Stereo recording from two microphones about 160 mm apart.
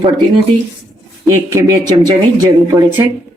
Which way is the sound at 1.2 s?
15° right (ahead or behind).